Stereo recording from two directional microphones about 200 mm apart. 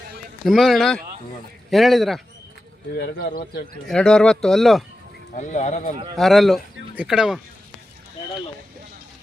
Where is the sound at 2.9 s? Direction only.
50° left (ahead or behind).